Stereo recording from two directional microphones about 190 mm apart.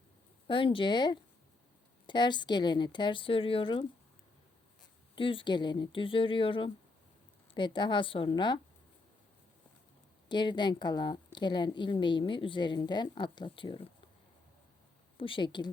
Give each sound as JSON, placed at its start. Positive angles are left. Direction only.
{"t": 0.4, "sound": "a woman's voice", "side_deg": 25}
{"t": 10.2, "sound": "a woman's voice", "side_deg": 25}
{"t": 15.2, "sound": "a woman's voice", "side_deg": 25}